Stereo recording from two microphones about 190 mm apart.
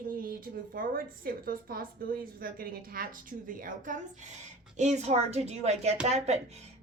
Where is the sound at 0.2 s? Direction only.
50° right (ahead or behind).